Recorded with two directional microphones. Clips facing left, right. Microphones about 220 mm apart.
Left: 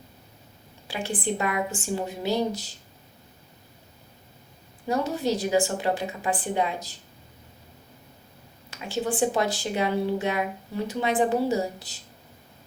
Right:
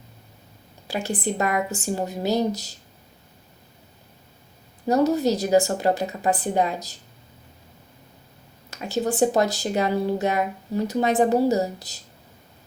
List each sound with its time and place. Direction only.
0.9 s speech: 40° right (ahead or behind)
4.9 s speech: 40° right (ahead or behind)
8.7 s speech: 40° right (ahead or behind)